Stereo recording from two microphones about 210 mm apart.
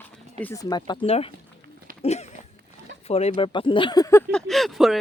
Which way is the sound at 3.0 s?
30° left (ahead or behind).